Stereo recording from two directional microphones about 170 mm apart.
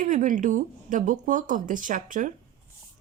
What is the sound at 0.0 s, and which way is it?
A woman's voice, 50° right (ahead or behind).